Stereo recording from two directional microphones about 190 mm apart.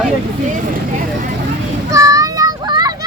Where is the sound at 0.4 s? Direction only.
45° right (ahead or behind).